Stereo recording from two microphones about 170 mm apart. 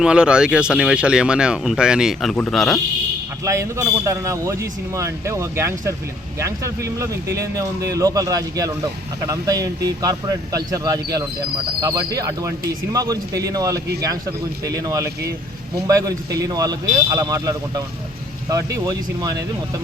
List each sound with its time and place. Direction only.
0.0 s speech: 5° right (ahead or behind)
3.4 s a man's voice: 15° right (ahead or behind)